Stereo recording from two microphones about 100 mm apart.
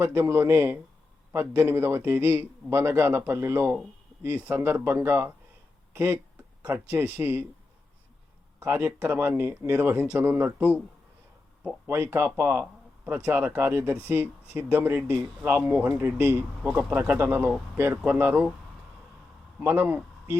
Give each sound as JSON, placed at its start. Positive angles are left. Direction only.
{"t": 0.0, "sound": "a man's voice", "side_deg": -25}
{"t": 8.5, "sound": "a man's voice", "side_deg": -20}
{"t": 12.1, "sound": "a man's voice", "side_deg": -25}
{"t": 19.6, "sound": "speech", "side_deg": -20}